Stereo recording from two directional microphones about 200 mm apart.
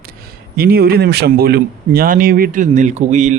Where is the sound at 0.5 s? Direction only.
50° right (ahead or behind).